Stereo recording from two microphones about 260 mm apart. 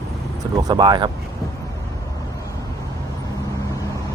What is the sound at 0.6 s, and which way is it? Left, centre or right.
Speech, centre.